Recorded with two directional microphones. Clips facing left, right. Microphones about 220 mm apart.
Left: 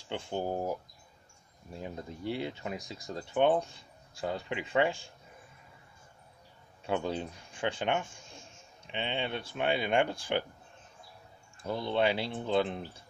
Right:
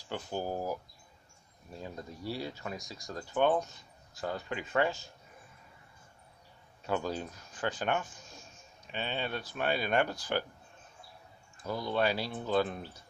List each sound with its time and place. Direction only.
0.1 s speech: 25° left (ahead or behind)
1.8 s speech: 20° left (ahead or behind)
7.0 s speech: 25° left (ahead or behind)
11.5 s speech: 25° left (ahead or behind)